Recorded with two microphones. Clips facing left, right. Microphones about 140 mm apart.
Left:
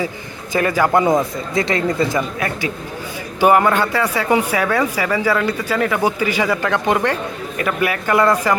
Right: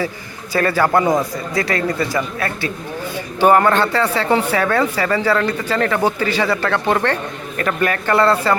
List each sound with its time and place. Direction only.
0.5 s speech: 15° left (ahead or behind)